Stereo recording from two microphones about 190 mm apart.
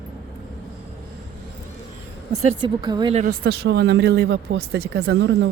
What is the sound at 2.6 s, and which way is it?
Speech, 25° right (ahead or behind).